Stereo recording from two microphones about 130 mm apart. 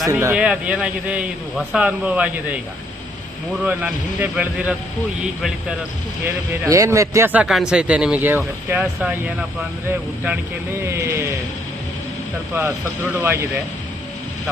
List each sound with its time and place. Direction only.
0.1 s a man's voice: 20° right (ahead or behind)
0.3 s speech: 10° right (ahead or behind)
3.6 s speech: 10° right (ahead or behind)
6.2 s a man's voice: 20° right (ahead or behind)
7.3 s speech: 5° right (ahead or behind)
10.8 s a man's voice: 20° right (ahead or behind)
12.5 s speech: 15° right (ahead or behind)